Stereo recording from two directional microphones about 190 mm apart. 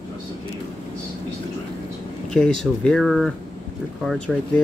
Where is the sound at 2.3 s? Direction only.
5° left (ahead or behind).